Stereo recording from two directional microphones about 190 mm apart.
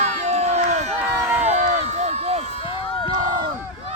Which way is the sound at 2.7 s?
25° left (ahead or behind).